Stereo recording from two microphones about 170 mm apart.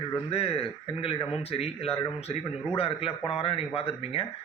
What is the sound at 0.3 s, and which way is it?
Speech, 35° left (ahead or behind).